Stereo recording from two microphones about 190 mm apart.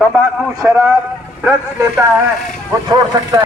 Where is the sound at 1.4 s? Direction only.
15° right (ahead or behind).